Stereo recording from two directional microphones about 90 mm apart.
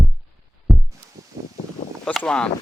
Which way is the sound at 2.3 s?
10° left (ahead or behind).